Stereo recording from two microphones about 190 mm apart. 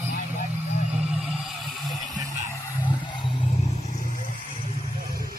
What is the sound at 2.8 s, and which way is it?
Music, 25° left (ahead or behind).